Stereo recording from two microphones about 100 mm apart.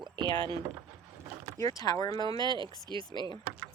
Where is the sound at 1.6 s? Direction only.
35° left (ahead or behind).